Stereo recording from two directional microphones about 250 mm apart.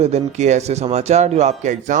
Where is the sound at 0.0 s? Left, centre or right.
Right.